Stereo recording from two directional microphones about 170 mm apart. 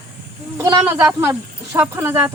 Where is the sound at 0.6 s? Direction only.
20° right (ahead or behind).